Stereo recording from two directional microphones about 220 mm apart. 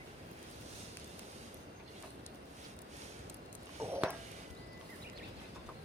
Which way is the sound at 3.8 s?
30° right (ahead or behind).